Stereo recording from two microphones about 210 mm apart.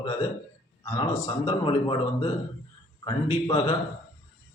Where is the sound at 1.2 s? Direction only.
25° left (ahead or behind).